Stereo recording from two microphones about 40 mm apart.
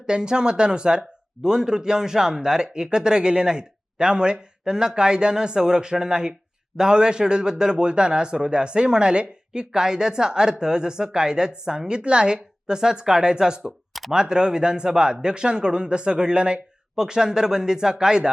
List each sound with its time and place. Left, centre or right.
0.0 s speech: right
16.9 s speech: centre